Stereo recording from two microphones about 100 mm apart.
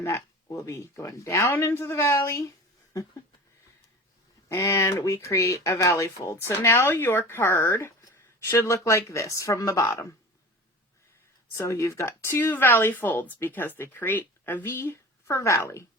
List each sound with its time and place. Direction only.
0.4 s speech: 30° left (ahead or behind)
4.4 s speech: 30° left (ahead or behind)
11.5 s speech: 30° left (ahead or behind)